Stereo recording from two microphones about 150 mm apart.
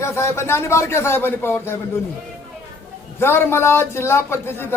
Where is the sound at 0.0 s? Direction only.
20° left (ahead or behind).